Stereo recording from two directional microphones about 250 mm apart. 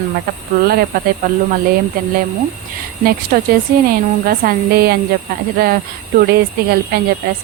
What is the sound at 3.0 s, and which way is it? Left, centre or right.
Speech, right.